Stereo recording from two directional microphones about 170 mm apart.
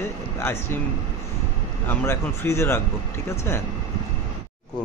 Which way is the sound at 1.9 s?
15° left (ahead or behind).